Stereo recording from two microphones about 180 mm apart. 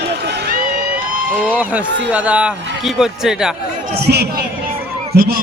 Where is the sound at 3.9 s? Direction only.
65° right (ahead or behind).